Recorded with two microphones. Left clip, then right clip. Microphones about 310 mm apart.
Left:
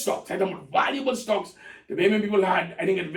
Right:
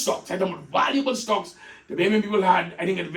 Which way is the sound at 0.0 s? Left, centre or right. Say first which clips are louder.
Right 1 dB; centre.